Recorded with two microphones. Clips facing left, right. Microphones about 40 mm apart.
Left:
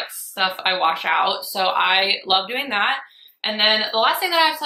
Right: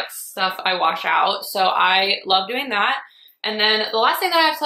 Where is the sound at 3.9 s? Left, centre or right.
Left.